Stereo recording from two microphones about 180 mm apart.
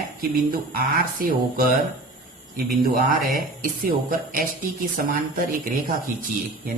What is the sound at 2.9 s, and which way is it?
Speech, 50° right (ahead or behind).